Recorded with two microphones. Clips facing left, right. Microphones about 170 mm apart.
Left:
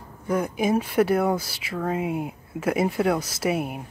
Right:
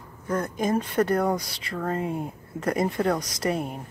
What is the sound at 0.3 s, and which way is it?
Speech, 10° left (ahead or behind).